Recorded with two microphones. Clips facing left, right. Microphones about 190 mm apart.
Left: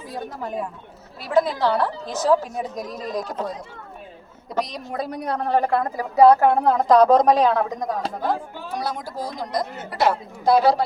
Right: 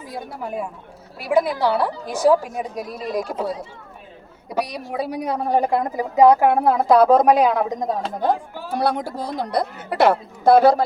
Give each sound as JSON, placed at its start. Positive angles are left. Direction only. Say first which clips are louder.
{"t": 0.1, "sound": "a woman's voice", "louder": "even", "side_deg": -10}
{"t": 8.7, "sound": "a woman's voice", "louder": "right 7 dB", "side_deg": -60}